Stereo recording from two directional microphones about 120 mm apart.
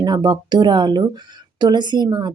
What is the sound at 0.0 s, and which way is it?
A woman's voice, 35° right (ahead or behind).